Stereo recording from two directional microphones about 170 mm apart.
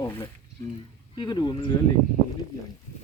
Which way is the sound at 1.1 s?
25° left (ahead or behind).